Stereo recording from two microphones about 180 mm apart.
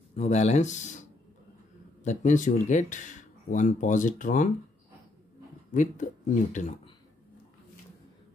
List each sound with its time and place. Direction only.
0.1 s speech: 40° left (ahead or behind)
2.0 s speech: 45° left (ahead or behind)
5.7 s speech: 45° left (ahead or behind)